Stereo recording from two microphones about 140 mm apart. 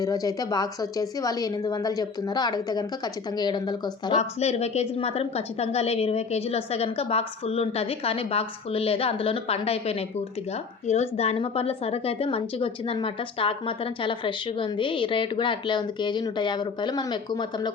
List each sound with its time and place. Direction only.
0.0 s a woman's voice: 25° left (ahead or behind)
4.2 s a woman's voice: 50° left (ahead or behind); by 17.7 s 30° left (ahead or behind)